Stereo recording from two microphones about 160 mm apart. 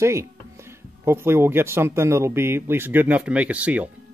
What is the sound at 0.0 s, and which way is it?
Speech, 15° right (ahead or behind).